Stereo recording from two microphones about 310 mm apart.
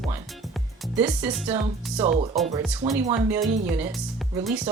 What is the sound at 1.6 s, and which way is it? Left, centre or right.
Speech, centre.